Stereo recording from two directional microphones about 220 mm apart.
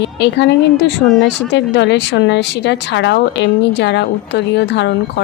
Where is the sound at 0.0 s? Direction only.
50° left (ahead or behind).